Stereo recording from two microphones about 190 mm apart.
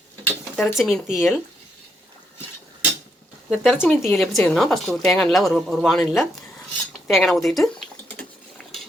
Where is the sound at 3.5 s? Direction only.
Centre (ahead or behind).